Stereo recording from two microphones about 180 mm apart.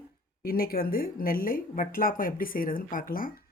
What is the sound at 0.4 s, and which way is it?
Speech, 55° left (ahead or behind).